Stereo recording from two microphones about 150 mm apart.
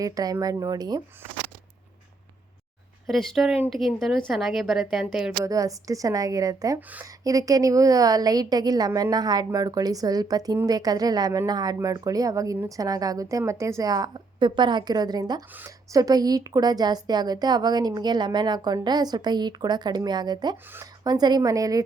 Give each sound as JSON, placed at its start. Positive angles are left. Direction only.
{"t": 0.0, "sound": "a woman's voice", "side_deg": -25}
{"t": 3.1, "sound": "a woman's voice", "side_deg": 0}
{"t": 5.4, "sound": "a woman's voice", "side_deg": -20}
{"t": 6.7, "sound": "speech", "side_deg": -10}
{"t": 7.3, "sound": "a woman's voice", "side_deg": -25}